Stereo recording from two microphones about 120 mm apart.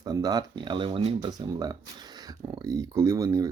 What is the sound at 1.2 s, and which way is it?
Speech, 35° right (ahead or behind).